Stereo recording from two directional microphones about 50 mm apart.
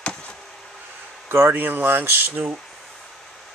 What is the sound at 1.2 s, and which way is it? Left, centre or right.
Speech, right.